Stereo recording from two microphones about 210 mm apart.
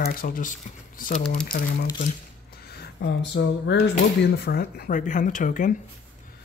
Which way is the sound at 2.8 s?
60° left (ahead or behind).